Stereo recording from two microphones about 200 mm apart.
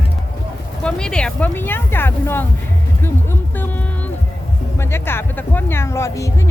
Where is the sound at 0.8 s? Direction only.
5° left (ahead or behind).